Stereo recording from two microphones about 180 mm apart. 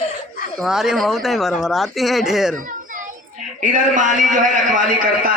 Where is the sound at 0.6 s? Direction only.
Centre (ahead or behind).